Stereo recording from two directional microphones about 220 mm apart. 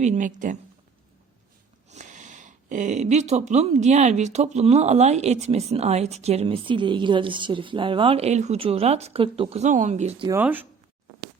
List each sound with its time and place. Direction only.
0.0 s a woman's voice: 35° right (ahead or behind)
1.9 s speech: 35° right (ahead or behind)
10.2 s speech: 10° right (ahead or behind)